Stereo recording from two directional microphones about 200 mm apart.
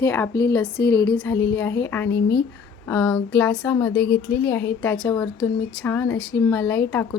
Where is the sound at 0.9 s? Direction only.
55° left (ahead or behind).